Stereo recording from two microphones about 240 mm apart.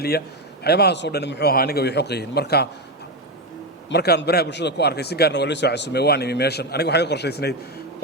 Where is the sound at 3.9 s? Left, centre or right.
Left.